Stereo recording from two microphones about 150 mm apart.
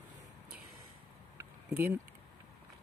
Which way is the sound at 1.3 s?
15° right (ahead or behind).